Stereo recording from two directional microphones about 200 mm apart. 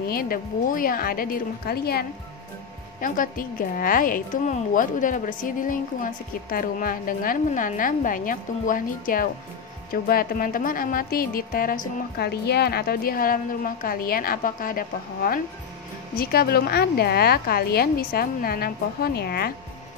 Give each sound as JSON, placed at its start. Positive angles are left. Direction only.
{"t": 0.1, "sound": "a woman's voice", "side_deg": 45}